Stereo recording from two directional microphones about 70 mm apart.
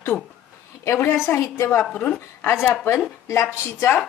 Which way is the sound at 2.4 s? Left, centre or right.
Left.